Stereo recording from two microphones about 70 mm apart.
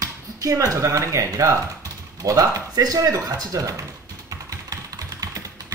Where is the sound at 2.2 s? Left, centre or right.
Right.